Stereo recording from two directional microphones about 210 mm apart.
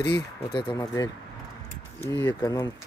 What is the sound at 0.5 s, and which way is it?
Speech, 20° left (ahead or behind).